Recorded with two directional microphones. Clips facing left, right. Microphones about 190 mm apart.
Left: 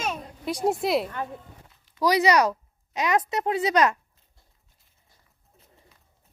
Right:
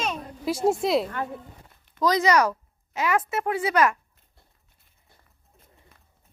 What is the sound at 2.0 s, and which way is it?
A woman's voice, 15° left (ahead or behind).